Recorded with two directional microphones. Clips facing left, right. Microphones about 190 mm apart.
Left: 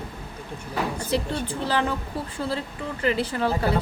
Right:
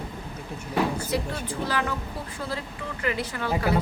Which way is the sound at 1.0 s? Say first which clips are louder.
Left 3 dB; 30° left (ahead or behind).